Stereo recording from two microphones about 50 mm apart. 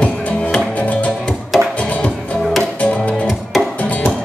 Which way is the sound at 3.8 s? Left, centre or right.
Left.